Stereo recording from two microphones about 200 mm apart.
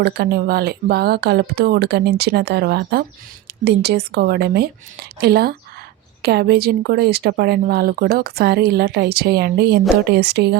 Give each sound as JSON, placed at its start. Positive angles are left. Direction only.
{"t": 0.0, "sound": "speech", "side_deg": -50}